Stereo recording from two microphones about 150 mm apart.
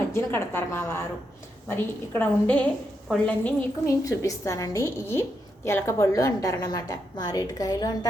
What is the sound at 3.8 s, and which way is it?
A woman's voice, 20° left (ahead or behind).